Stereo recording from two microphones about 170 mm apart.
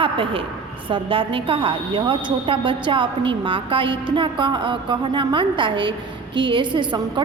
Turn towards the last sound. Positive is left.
turn(degrees=-30)  # may be behind; listen again after turning